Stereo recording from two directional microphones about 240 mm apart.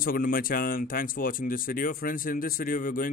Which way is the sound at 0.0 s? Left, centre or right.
Left.